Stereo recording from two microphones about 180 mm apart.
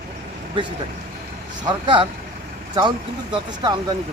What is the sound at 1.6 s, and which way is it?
Speech, 25° right (ahead or behind).